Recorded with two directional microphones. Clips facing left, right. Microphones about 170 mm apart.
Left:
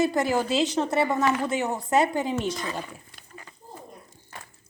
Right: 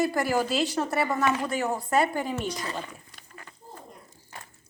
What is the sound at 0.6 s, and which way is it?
A woman's voice, 20° left (ahead or behind).